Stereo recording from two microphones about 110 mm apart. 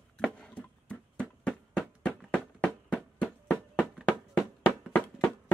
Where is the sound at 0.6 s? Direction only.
10° left (ahead or behind).